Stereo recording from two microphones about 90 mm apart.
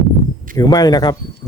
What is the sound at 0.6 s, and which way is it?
Speech, 45° left (ahead or behind).